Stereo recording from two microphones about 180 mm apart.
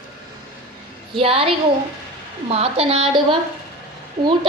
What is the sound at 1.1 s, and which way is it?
A woman's voice, 30° right (ahead or behind).